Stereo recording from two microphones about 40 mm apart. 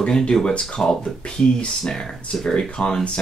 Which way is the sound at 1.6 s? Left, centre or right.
Centre.